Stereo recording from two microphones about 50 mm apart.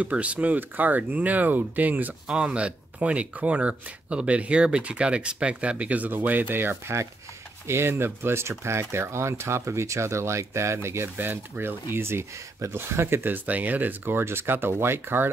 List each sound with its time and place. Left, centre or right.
0.0 s speech: right
2.2 s speech: right
7.6 s speech: right
11.1 s speech: right
13.3 s speech: right